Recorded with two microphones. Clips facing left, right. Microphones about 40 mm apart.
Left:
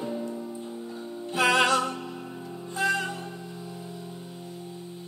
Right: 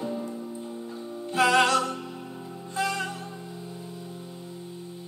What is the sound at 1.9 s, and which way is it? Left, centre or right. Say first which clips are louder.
Music: left 1 dB; centre.